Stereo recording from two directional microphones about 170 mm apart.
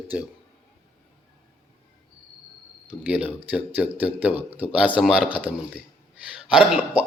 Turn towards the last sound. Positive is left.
turn(degrees=-5)  # may be behind; listen again after turning